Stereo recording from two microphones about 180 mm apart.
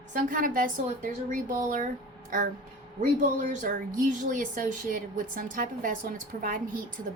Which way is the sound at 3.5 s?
50° right (ahead or behind).